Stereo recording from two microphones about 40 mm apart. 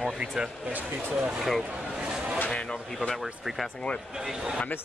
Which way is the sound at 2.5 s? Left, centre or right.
Left.